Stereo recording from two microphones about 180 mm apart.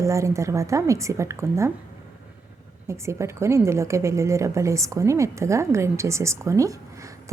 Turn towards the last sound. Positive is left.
turn(degrees=-15)  # may be behind; listen again after turning